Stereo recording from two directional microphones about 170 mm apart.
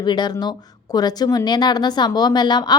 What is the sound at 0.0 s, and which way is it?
Speech, 25° left (ahead or behind).